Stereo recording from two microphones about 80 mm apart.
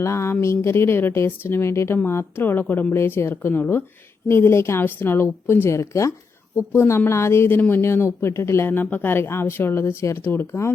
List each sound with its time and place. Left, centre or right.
0.0 s speech: left